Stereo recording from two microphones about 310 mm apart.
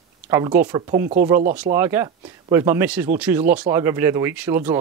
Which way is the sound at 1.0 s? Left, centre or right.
Right.